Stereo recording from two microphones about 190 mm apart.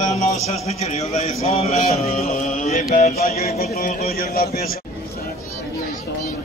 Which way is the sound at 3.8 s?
45° left (ahead or behind).